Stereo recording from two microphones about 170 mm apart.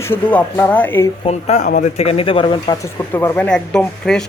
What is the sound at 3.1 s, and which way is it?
Speech, 15° left (ahead or behind).